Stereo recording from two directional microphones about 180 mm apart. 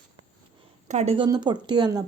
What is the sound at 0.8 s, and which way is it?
Speech, 40° right (ahead or behind).